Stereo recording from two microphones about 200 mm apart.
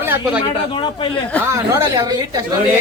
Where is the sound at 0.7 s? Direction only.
25° left (ahead or behind).